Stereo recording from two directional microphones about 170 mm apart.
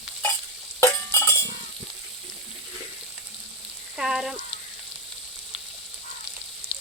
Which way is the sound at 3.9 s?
5° right (ahead or behind).